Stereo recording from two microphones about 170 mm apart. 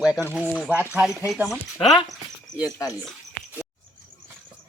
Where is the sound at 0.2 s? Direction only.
10° left (ahead or behind).